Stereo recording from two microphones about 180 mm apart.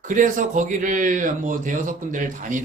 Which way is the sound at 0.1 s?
45° right (ahead or behind).